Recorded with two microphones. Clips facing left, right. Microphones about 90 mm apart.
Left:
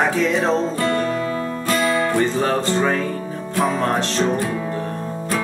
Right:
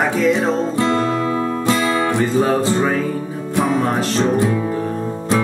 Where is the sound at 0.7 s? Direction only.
20° right (ahead or behind).